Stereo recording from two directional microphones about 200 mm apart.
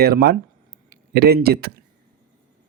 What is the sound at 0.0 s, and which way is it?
Speech, 50° right (ahead or behind).